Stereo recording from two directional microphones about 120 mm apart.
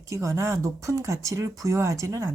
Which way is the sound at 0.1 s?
25° right (ahead or behind).